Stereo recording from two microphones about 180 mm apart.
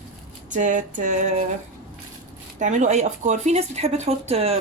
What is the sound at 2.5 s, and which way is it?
Speech, 40° right (ahead or behind).